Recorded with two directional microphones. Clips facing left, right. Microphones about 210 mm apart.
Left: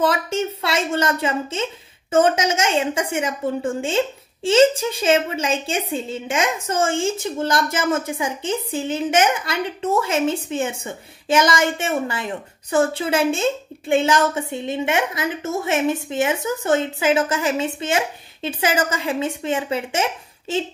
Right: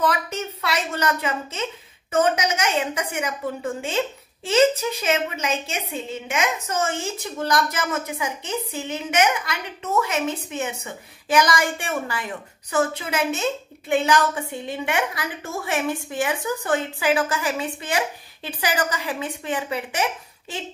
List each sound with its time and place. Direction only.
0.0 s a woman's voice: 30° left (ahead or behind)